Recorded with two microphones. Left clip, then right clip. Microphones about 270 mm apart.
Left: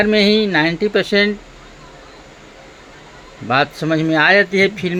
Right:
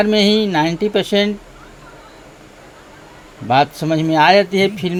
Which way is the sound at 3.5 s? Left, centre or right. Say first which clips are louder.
Right 2 dB; right.